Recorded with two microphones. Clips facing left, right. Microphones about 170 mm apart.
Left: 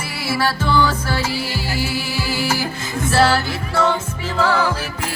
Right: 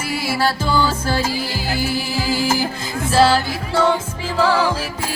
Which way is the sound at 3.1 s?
15° right (ahead or behind).